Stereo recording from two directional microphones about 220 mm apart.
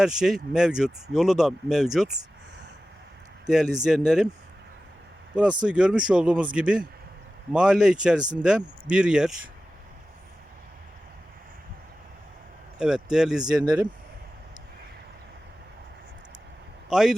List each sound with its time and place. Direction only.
0.0 s speech: centre (ahead or behind)
3.4 s speech: centre (ahead or behind)
5.3 s speech: 5° right (ahead or behind)
12.8 s speech: 5° right (ahead or behind)
16.9 s speech: centre (ahead or behind)